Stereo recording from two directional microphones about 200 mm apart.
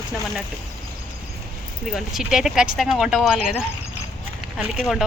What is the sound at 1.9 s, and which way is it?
Speech, centre (ahead or behind).